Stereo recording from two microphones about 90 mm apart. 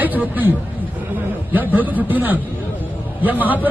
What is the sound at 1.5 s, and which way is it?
Speech, 20° right (ahead or behind).